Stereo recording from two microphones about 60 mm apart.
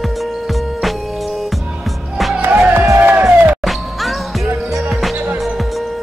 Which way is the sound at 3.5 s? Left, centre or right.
Centre.